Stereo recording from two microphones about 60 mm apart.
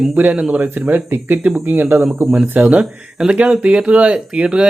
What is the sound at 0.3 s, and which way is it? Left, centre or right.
Speech, centre.